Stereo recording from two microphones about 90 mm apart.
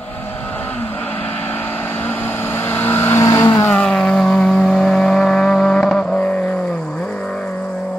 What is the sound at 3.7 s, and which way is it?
Vehicle, 10° left (ahead or behind).